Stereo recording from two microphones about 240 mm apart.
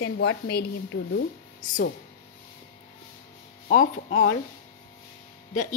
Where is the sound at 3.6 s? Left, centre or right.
Left.